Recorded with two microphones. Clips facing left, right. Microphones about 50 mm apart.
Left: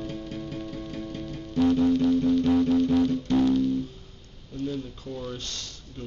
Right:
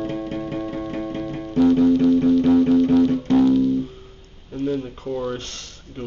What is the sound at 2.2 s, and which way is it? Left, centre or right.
Music, right.